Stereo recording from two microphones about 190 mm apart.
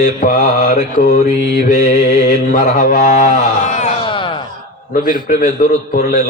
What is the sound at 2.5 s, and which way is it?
Mantra, 45° left (ahead or behind).